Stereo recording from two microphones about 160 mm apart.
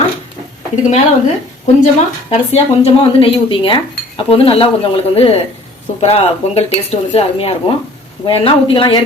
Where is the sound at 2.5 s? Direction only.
35° left (ahead or behind).